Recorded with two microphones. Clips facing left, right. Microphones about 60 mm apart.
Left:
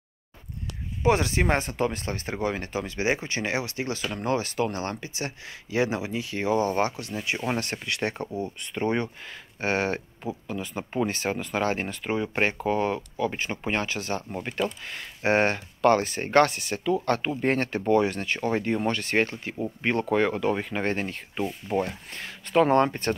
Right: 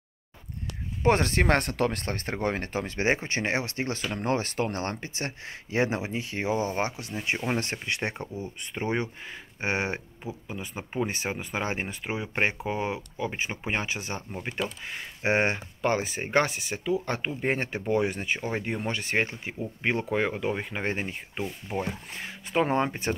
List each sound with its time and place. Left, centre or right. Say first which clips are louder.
1.0 s speech: even; right; by 23.1 s centre